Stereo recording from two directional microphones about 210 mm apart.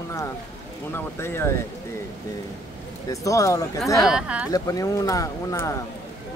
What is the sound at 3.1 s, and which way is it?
Speech, 15° left (ahead or behind).